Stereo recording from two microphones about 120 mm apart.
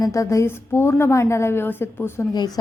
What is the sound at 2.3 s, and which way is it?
Speech, 30° left (ahead or behind).